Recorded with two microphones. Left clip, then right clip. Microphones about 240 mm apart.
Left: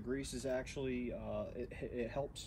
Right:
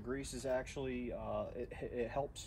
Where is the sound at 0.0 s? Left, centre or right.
Centre.